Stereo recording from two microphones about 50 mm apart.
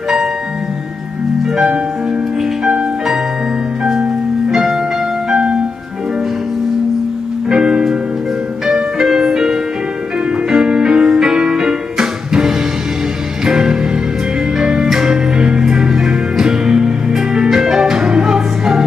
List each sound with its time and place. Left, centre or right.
1.4 s music: centre
4.5 s music: centre
7.4 s music: centre